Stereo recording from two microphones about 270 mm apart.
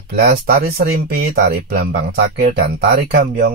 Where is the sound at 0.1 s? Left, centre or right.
Right.